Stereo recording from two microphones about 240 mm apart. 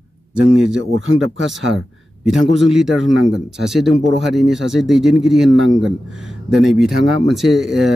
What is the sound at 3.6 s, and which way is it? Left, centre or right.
Speech, centre.